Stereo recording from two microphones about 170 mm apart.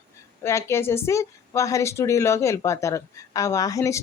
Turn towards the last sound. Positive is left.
turn(degrees=20)  # may be behind; listen again after turning